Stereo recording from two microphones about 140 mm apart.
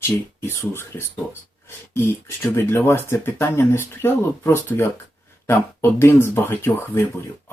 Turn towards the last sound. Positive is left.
turn(degrees=15)  # may be behind; listen again after turning